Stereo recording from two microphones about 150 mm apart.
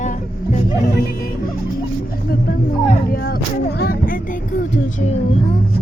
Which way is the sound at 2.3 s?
80° left.